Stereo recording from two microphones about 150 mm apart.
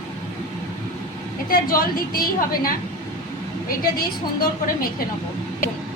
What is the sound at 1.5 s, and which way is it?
A woman's voice, 70° left (ahead or behind).